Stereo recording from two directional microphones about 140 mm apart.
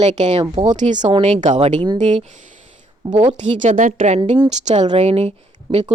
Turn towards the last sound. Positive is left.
turn(degrees=-50)  # may be behind; listen again after turning